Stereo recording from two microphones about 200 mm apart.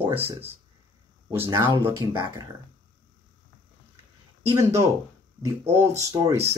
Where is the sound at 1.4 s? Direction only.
20° right (ahead or behind).